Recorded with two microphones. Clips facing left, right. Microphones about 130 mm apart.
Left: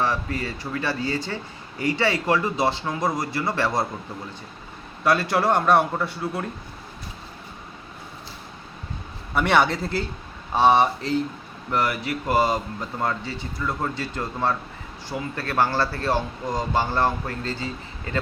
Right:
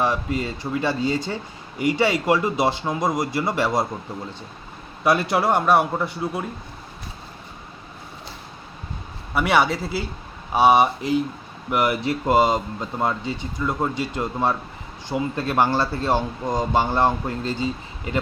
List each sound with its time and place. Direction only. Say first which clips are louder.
0.0 s speech: right 2 dB; 15° right (ahead or behind)
5.0 s speech: right 1 dB; 15° right (ahead or behind)
9.3 s speech: even; 5° right (ahead or behind)